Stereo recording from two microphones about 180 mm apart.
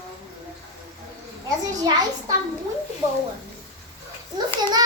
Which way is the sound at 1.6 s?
20° right (ahead or behind).